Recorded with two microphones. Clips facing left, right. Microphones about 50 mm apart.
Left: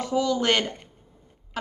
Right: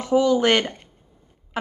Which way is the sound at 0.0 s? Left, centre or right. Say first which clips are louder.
Right 6 dB; right.